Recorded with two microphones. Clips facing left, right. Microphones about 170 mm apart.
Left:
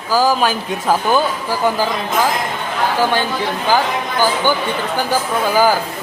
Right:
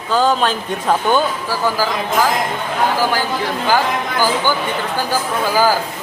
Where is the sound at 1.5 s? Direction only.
20° left (ahead or behind).